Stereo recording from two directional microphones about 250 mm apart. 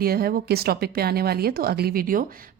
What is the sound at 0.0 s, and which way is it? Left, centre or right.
Speech, right.